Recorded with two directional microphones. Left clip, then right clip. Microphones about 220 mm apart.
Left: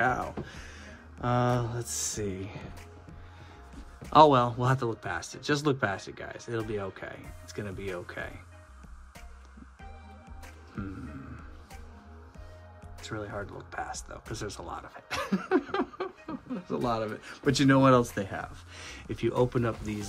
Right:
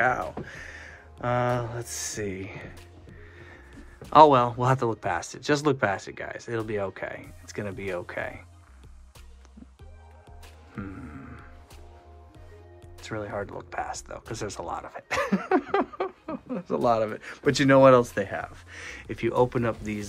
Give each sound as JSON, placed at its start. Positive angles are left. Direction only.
{"t": 0.0, "sound": "speech", "side_deg": 20}
{"t": 4.1, "sound": "speech", "side_deg": 15}
{"t": 10.8, "sound": "speech", "side_deg": 10}
{"t": 13.0, "sound": "speech", "side_deg": 10}